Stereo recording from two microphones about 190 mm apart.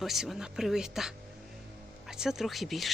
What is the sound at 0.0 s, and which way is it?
Speech, centre (ahead or behind).